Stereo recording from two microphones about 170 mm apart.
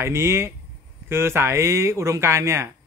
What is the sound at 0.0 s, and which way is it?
Speech, 15° right (ahead or behind).